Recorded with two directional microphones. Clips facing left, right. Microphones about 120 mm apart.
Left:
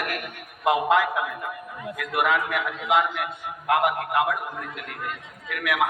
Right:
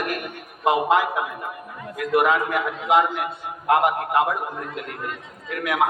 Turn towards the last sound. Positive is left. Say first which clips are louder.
# right 2 dB
turn(degrees=-30)  # may be behind; listen again after turning